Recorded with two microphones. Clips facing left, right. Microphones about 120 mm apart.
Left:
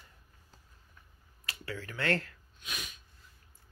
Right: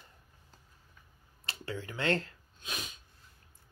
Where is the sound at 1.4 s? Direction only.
25° right (ahead or behind).